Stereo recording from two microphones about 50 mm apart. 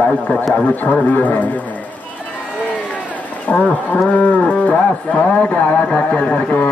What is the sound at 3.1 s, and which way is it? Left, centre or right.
Cattle, left.